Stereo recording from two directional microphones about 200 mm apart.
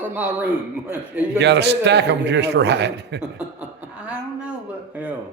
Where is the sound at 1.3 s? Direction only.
60° right (ahead or behind).